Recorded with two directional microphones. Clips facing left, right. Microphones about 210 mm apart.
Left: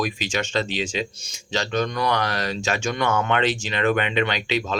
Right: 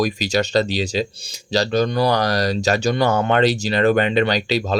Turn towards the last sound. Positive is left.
turn(degrees=-35)  # may be behind; listen again after turning